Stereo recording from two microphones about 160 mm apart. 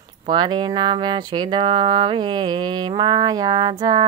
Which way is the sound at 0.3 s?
25° right (ahead or behind).